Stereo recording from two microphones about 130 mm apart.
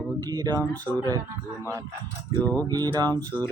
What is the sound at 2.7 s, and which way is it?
Speech, 30° right (ahead or behind).